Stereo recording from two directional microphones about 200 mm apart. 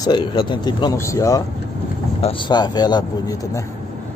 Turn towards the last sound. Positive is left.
turn(degrees=20)  # may be behind; listen again after turning